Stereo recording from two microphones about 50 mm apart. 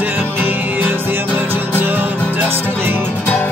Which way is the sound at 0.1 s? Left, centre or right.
Right.